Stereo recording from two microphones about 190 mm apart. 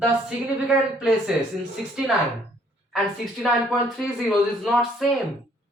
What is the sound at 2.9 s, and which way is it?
Speech, centre (ahead or behind).